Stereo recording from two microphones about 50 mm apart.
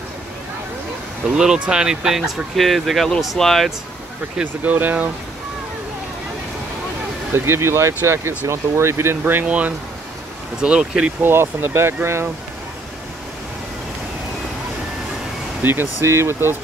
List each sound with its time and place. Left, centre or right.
1.3 s speech: centre
2.5 s speech: centre
4.6 s speech: right
7.3 s speech: right
9.2 s speech: right
10.6 s speech: centre
11.1 s speech: right
15.6 s speech: right
16.0 s speech: right